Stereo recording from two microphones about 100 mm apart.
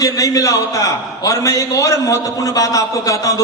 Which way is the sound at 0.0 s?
35° left (ahead or behind).